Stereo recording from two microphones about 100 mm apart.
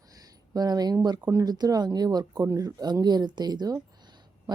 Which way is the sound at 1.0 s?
40° right (ahead or behind).